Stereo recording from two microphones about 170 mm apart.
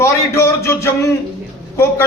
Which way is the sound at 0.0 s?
15° left (ahead or behind).